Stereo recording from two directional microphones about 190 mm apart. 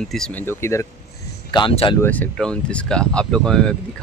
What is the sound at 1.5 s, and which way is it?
Speech, 30° left (ahead or behind).